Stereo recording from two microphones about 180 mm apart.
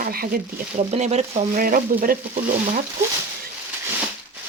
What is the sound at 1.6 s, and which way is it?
Speech, 50° right (ahead or behind).